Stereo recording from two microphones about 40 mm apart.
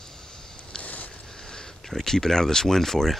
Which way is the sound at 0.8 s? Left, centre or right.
Left.